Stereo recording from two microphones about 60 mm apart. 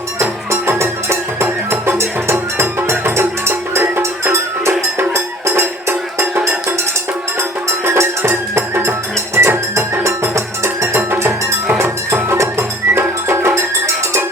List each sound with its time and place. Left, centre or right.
0.8 s music: right
7.9 s music: right